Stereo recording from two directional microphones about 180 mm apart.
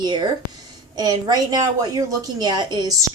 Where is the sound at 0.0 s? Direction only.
25° right (ahead or behind).